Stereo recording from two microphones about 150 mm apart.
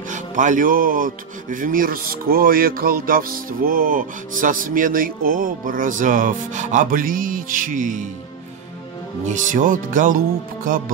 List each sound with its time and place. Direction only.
0.1 s speech: 55° right (ahead or behind)
9.3 s speech: 60° right (ahead or behind)